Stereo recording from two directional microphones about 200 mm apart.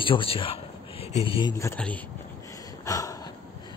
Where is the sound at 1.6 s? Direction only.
10° left (ahead or behind).